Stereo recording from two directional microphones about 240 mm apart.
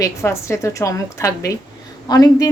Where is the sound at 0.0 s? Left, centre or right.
Centre.